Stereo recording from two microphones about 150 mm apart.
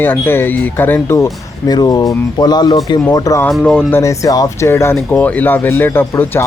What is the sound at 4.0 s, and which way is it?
Speech, 20° left (ahead or behind).